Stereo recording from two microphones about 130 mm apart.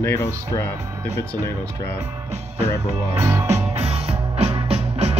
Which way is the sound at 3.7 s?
55° right (ahead or behind).